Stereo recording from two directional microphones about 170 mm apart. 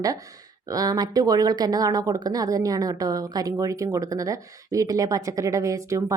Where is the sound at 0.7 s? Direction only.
20° right (ahead or behind).